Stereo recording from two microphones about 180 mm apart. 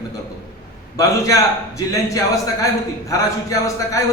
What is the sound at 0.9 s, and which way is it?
A man's voice, 15° left (ahead or behind).